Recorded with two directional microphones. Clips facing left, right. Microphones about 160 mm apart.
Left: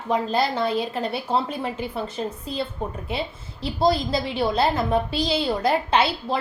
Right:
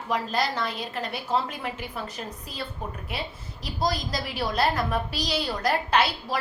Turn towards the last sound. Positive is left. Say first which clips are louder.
# left 3 dB
turn(degrees=25)  # may be behind; listen again after turning